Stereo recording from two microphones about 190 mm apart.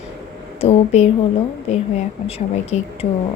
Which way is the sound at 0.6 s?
35° left (ahead or behind).